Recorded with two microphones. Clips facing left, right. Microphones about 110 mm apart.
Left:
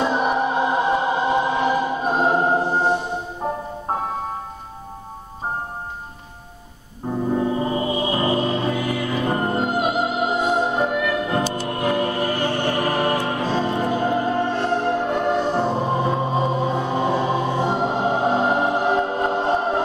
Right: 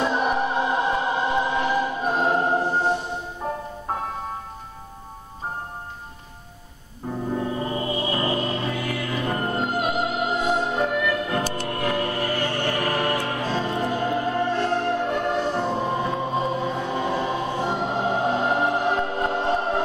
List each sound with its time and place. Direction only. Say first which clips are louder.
0.0 s music: left 2 dB; 20° left (ahead or behind)
7.3 s music: left 5 dB; 20° left (ahead or behind)
15.5 s music: left 3 dB; 25° left (ahead or behind)